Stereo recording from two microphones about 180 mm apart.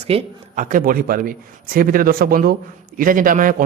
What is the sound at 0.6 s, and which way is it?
A man's voice, 50° right (ahead or behind).